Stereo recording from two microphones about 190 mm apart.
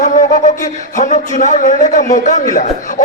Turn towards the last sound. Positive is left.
turn(degrees=40)  # may be behind; listen again after turning